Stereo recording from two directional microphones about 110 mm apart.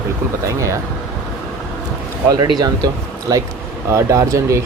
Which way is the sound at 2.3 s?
40° right (ahead or behind).